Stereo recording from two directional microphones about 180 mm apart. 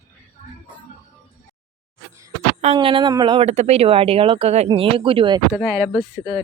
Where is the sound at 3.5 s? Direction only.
35° right (ahead or behind).